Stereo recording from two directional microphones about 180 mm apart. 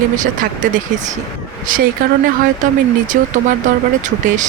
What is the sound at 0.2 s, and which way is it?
Speech, 45° right (ahead or behind).